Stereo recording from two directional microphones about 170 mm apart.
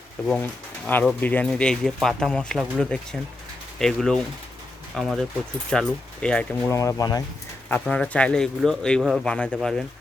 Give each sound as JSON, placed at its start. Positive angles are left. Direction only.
{"t": 0.3, "sound": "a man's voice", "side_deg": 10}
{"t": 7.7, "sound": "a man's voice", "side_deg": 5}